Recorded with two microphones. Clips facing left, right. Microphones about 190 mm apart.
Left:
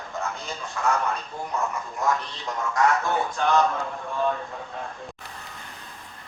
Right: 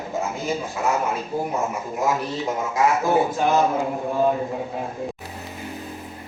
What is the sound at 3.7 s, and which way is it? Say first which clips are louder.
Speech: right 7 dB; 15° right (ahead or behind).